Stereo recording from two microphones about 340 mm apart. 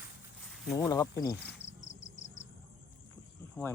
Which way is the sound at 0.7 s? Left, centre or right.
Centre.